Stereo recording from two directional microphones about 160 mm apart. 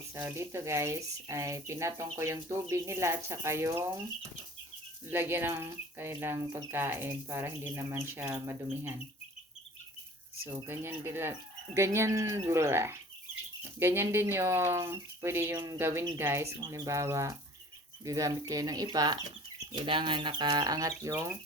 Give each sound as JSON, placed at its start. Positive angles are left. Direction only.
{"t": 0.1, "sound": "speech", "side_deg": -15}
{"t": 10.7, "sound": "speech", "side_deg": -15}